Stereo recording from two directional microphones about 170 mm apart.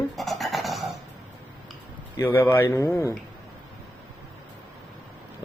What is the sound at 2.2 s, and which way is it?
Speech, 15° left (ahead or behind).